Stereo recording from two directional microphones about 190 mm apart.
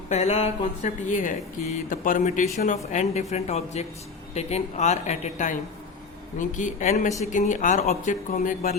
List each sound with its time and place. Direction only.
0.1 s speech: 35° left (ahead or behind)